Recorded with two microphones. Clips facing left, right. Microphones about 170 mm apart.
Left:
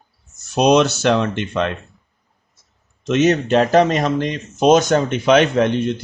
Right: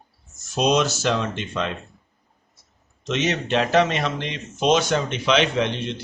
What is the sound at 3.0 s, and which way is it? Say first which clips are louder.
Speech: left 8 dB; 50° left (ahead or behind).